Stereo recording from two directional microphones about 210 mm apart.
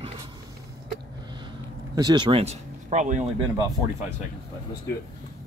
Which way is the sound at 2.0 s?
20° right (ahead or behind).